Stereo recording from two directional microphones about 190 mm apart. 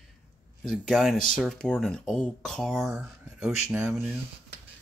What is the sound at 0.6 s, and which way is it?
Speech, centre (ahead or behind).